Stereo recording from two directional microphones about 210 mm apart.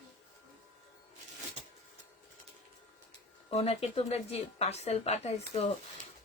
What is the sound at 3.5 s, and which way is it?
Speech, 30° left (ahead or behind).